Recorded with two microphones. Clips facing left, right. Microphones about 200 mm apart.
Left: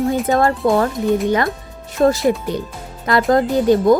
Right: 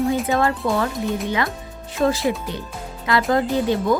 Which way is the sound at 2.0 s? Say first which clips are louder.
Left 5 dB; 45° left (ahead or behind).